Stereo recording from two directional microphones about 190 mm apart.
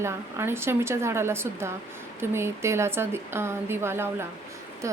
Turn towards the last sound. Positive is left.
turn(degrees=-15)  # may be behind; listen again after turning